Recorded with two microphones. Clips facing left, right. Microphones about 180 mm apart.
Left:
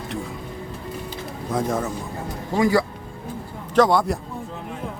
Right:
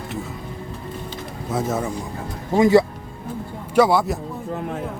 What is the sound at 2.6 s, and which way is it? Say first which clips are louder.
Speech: right 5 dB; 25° right (ahead or behind).